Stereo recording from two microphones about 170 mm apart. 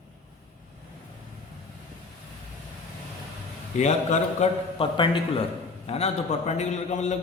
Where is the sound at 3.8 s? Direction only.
45° left (ahead or behind).